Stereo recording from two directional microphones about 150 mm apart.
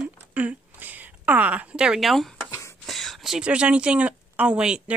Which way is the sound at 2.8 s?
Centre (ahead or behind).